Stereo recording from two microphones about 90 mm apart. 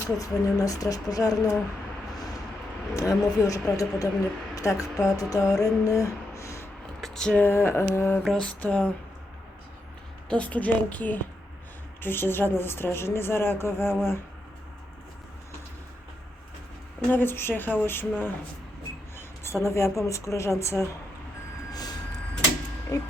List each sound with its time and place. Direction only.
0.2 s a woman's voice: 40° left (ahead or behind)
2.9 s a woman's voice: 35° left (ahead or behind)
7.0 s a sound: 5° left (ahead or behind)
7.4 s a woman's voice: 25° left (ahead or behind)
8.2 s a woman's voice: 5° left (ahead or behind)
10.2 s a woman's voice: 15° left (ahead or behind)
17.1 s a woman's voice: 25° left (ahead or behind)
21.7 s vehicle: 45° left (ahead or behind)
22.9 s a woman's voice: 40° left (ahead or behind)